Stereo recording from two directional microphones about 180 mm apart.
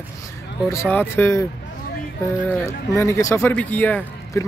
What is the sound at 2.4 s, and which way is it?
Speech, 15° left (ahead or behind).